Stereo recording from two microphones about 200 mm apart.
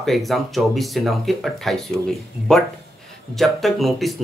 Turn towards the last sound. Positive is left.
turn(degrees=0)  # may be behind; listen again after turning